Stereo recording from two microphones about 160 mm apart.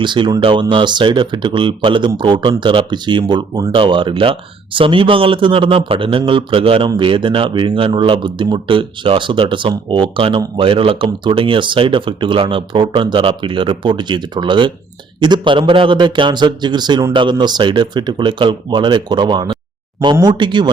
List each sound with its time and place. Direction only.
0.0 s a man's voice: 30° right (ahead or behind)